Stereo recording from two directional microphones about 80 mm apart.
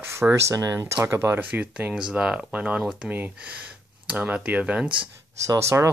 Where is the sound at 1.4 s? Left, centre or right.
Right.